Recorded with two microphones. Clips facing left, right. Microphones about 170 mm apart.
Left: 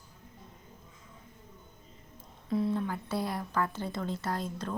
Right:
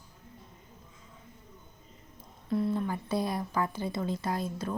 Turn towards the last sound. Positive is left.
turn(degrees=-10)  # may be behind; listen again after turning